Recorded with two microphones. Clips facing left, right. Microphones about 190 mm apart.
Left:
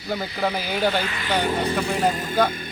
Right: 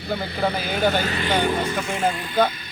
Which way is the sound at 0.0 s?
60° right (ahead or behind).